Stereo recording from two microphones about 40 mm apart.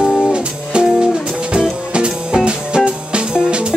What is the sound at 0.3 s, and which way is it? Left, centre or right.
Music, right.